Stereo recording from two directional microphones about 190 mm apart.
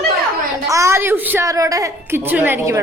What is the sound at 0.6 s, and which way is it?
A woman's voice, 15° right (ahead or behind).